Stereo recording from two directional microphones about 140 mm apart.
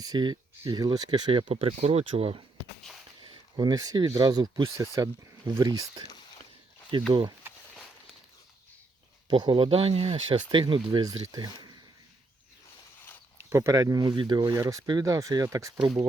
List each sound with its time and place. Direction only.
0.0 s speech: 30° right (ahead or behind); by 2.4 s 45° right (ahead or behind)
3.2 s speech: 30° right (ahead or behind)
7.1 s speech: 35° right (ahead or behind)
9.3 s speech: 35° right (ahead or behind)
13.5 s speech: 20° right (ahead or behind)